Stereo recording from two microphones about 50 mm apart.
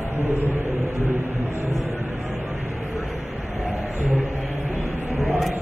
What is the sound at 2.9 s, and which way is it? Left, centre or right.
Vehicle, centre.